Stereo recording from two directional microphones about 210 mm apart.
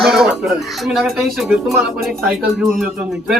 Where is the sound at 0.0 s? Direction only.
Centre (ahead or behind).